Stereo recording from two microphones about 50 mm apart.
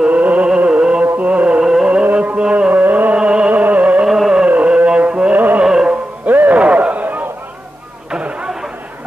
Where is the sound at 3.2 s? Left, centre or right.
Right.